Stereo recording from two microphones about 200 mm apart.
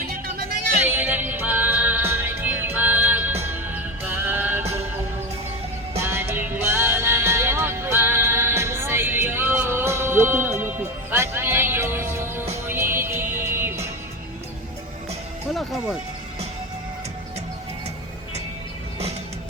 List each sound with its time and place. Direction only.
0.0 s music: 50° right (ahead or behind)
0.9 s music: 10° right (ahead or behind)
6.0 s music: 10° right (ahead or behind)
15.5 s music: centre (ahead or behind)